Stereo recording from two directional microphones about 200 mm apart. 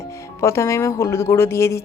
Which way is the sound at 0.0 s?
15° left (ahead or behind).